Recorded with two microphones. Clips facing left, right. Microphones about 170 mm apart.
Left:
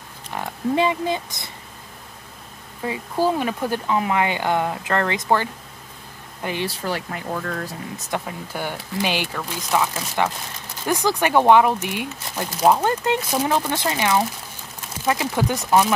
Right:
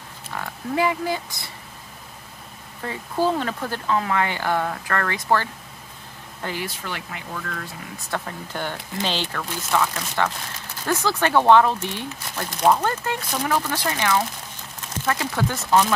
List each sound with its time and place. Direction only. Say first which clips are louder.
0.3 s speech: left 5 dB; 20° left (ahead or behind)
2.8 s speech: left 2 dB; 10° left (ahead or behind)
6.7 s speech: left 6 dB; 35° left (ahead or behind)
8.1 s speech: left 1 dB; 10° left (ahead or behind)
12.8 s speech: left 4 dB; 20° left (ahead or behind)